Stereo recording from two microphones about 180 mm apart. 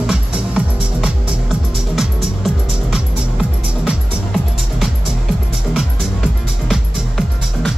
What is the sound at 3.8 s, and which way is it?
Music, centre (ahead or behind).